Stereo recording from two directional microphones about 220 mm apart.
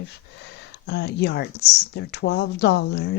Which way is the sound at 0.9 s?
50° left (ahead or behind).